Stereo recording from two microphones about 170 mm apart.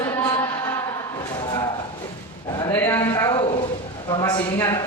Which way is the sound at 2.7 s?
15° left (ahead or behind).